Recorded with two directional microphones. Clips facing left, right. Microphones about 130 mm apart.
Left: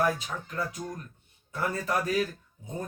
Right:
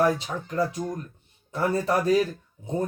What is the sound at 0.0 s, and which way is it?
Speech, 25° right (ahead or behind).